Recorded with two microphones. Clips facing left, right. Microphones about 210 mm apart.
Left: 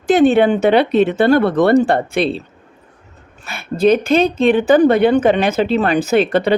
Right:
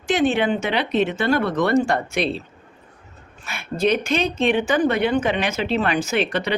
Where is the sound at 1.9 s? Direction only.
30° left (ahead or behind).